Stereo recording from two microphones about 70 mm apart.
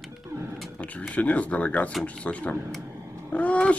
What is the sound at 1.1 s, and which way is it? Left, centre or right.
Speech, centre.